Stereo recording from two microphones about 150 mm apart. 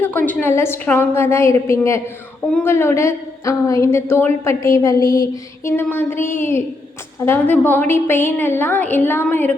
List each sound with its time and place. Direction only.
0.0 s a woman's voice: 10° left (ahead or behind)